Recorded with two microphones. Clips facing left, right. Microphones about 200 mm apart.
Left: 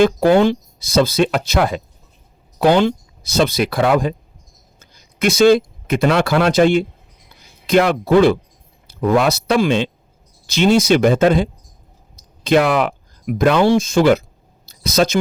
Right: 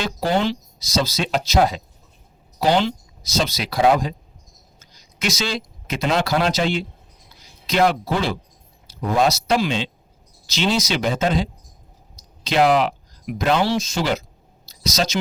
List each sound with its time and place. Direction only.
0.0 s speech: 55° left (ahead or behind)